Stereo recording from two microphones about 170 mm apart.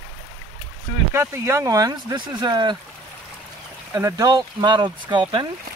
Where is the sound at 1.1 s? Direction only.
15° right (ahead or behind).